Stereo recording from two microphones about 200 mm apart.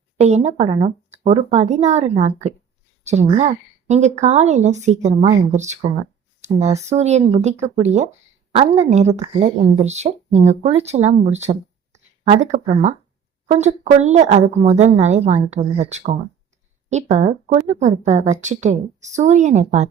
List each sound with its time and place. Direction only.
0.2 s speech: 35° right (ahead or behind)